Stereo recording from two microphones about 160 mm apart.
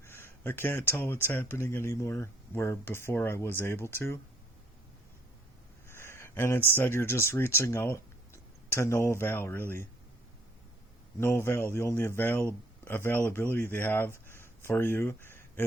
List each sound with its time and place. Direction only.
0.0 s speech: 15° left (ahead or behind)
5.9 s a sound: 15° left (ahead or behind)
6.7 s speech: 15° left (ahead or behind)
11.2 s speech: 15° left (ahead or behind)